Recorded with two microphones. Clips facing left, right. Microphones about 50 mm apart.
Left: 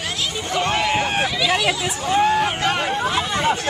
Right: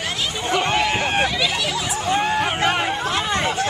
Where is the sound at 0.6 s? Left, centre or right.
Centre.